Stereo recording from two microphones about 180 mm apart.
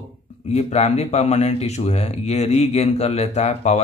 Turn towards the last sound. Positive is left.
turn(degrees=40)  # may be behind; listen again after turning